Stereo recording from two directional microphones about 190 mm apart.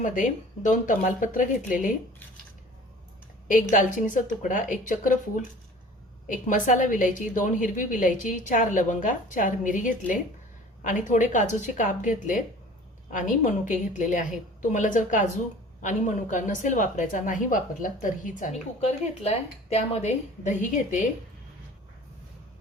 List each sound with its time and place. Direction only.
0.0 s a woman's voice: 45° left (ahead or behind)
3.5 s a woman's voice: 45° left (ahead or behind)
6.2 s a woman's voice: 45° left (ahead or behind)